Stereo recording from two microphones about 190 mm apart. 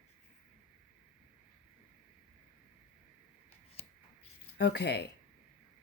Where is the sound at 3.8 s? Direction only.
30° left (ahead or behind).